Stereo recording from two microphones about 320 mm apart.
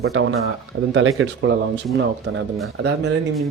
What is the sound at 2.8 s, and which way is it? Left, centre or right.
Speech, right.